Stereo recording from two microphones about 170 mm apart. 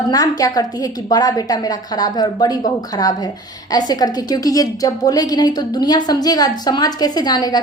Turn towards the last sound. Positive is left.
turn(degrees=25)  # may be behind; listen again after turning